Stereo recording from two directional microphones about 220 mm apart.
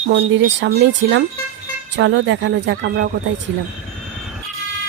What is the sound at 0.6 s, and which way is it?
Speech, 55° right (ahead or behind).